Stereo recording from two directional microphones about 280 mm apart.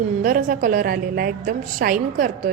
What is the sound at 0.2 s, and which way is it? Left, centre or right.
A woman's voice, right.